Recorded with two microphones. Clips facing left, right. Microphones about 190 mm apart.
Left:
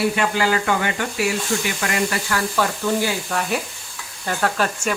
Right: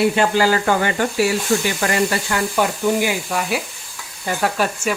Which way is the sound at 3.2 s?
5° right (ahead or behind).